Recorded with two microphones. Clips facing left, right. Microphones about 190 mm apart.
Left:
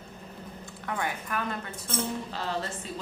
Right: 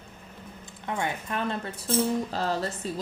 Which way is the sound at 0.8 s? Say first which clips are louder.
Right 2 dB; 25° right (ahead or behind).